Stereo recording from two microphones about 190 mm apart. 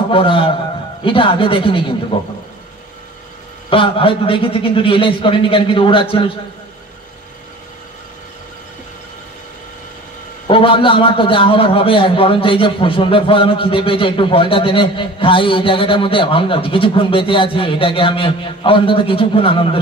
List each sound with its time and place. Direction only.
0.1 s a man's voice: 30° left (ahead or behind)
3.7 s a man's voice: 25° left (ahead or behind)
10.4 s a man's voice: 25° left (ahead or behind)